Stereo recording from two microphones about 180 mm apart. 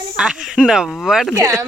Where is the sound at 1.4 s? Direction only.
20° right (ahead or behind).